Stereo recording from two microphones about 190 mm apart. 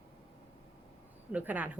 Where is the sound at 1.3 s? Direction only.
10° right (ahead or behind).